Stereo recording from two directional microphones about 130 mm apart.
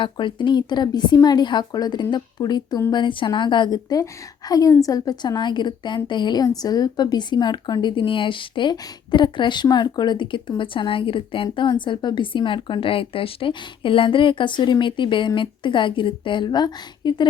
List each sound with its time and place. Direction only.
0.0 s speech: 40° left (ahead or behind)